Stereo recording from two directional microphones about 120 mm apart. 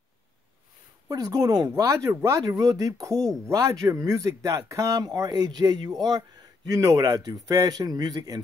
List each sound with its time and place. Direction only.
1.0 s a man's voice: 30° right (ahead or behind)